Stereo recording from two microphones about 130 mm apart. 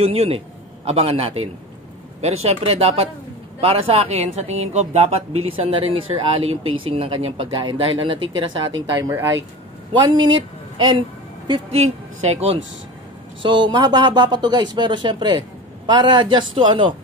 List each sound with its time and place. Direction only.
0.0 s speech: 50° right (ahead or behind)
9.9 s speech: 35° right (ahead or behind)
11.8 s speech: 55° right (ahead or behind)
13.4 s speech: 40° right (ahead or behind)